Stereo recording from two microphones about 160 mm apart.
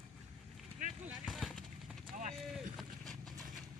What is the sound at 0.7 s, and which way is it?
Vehicle, 50° right (ahead or behind).